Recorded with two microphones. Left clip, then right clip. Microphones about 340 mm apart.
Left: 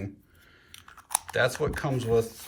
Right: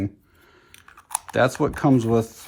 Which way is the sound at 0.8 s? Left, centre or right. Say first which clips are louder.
Right 1 dB; centre.